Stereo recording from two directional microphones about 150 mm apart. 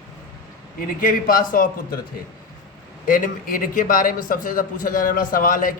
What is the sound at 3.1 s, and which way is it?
A man's voice, 65° left (ahead or behind).